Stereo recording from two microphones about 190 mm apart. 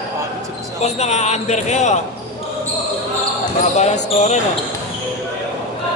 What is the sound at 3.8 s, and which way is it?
Speech, 35° left (ahead or behind).